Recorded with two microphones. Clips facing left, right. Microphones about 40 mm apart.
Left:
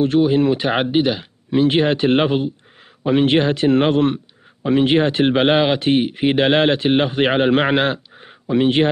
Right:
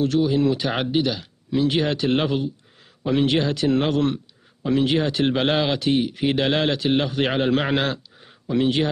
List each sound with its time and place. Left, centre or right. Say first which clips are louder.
0.0 s speech: left 4 dB; left